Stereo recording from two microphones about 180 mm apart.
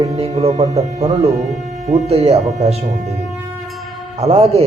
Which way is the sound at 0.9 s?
20° right (ahead or behind).